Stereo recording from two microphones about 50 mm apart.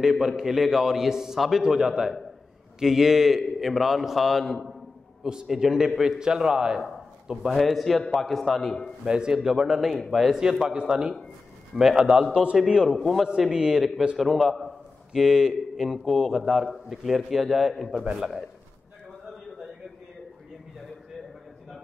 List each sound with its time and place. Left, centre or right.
0.0 s a man's voice: centre
7.4 s a man's voice: centre
9.0 s a man's voice: centre
10.3 s a man's voice: centre
12.8 s a man's voice: centre
13.5 s a man's voice: centre
14.2 s a man's voice: centre